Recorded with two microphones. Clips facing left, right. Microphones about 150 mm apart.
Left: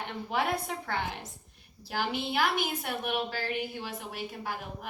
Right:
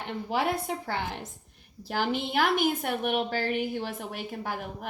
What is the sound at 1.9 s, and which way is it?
A woman's voice, 50° right (ahead or behind).